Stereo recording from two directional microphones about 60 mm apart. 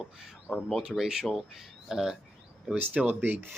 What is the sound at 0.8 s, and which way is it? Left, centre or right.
Speech, centre.